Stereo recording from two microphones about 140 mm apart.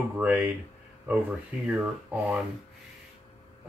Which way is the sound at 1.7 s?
10° right (ahead or behind).